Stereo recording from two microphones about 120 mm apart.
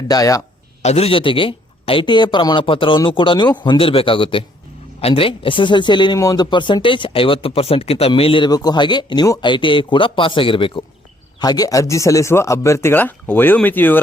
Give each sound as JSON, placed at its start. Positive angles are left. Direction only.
{"t": 0.1, "sound": "speech", "side_deg": 30}
{"t": 0.8, "sound": "a man's voice", "side_deg": 65}
{"t": 1.1, "sound": "speech", "side_deg": 45}
{"t": 8.4, "sound": "speech", "side_deg": 35}
{"t": 11.3, "sound": "speech", "side_deg": 35}